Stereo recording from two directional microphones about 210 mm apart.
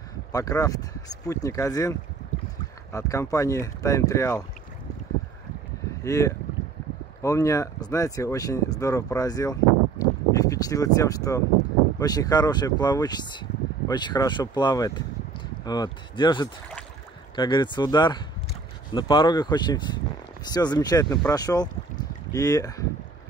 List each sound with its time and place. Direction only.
0.3 s speech: 15° left (ahead or behind)
6.0 s speech: 15° left (ahead or behind)